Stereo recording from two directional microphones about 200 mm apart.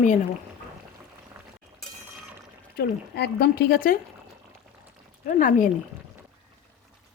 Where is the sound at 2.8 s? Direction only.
55° left (ahead or behind).